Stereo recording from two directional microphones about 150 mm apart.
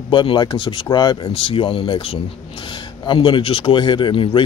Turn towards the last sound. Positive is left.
turn(degrees=35)  # may be behind; listen again after turning